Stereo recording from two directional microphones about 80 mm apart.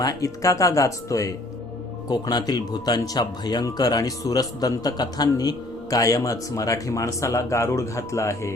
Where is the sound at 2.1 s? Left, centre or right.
Left.